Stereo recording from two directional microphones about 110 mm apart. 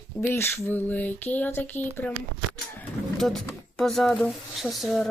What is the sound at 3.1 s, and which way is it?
Speech, 5° left (ahead or behind).